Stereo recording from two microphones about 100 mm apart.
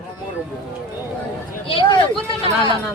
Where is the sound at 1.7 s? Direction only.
60° left (ahead or behind).